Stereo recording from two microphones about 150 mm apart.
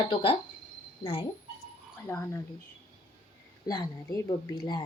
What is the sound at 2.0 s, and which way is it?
Speech, 20° left (ahead or behind).